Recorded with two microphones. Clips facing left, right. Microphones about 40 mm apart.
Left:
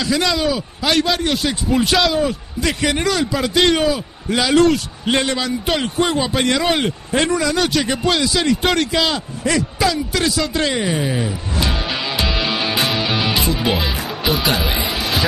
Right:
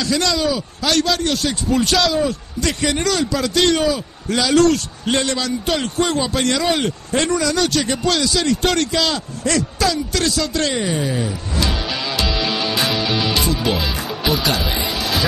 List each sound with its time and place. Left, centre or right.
0.0 s a man's voice: centre
11.1 s music: left
14.2 s speech: centre
14.5 s a sound: centre